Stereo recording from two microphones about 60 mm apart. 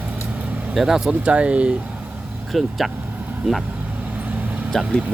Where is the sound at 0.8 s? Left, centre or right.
Centre.